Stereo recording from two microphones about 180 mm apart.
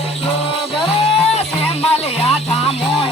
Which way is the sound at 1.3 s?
35° left (ahead or behind).